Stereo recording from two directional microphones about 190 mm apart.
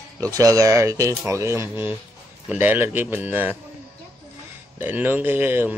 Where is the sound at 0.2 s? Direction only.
15° right (ahead or behind).